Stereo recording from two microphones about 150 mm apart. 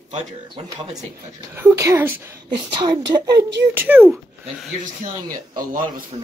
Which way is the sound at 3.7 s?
15° right (ahead or behind).